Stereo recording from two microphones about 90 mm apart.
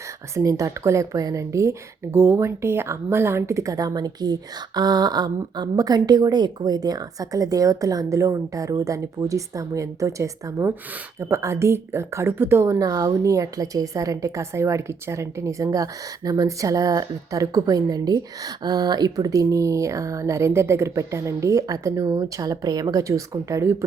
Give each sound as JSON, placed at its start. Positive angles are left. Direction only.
{"t": 0.3, "sound": "a woman's voice", "side_deg": -35}
{"t": 12.8, "sound": "a woman's voice", "side_deg": -40}
{"t": 22.2, "sound": "a woman's voice", "side_deg": -45}